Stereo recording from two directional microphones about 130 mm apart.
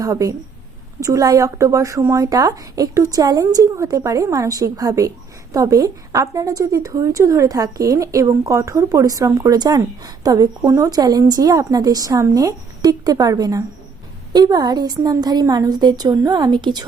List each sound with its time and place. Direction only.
0.0 s a woman's voice: 25° right (ahead or behind)